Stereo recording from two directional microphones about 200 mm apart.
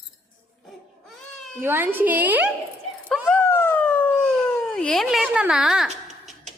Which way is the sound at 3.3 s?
10° left (ahead or behind).